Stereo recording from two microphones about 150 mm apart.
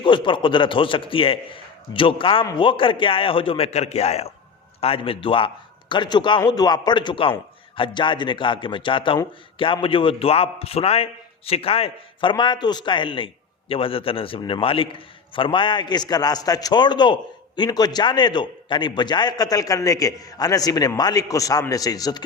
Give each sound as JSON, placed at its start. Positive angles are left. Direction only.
{"t": 0.0, "sound": "a man's voice", "side_deg": 35}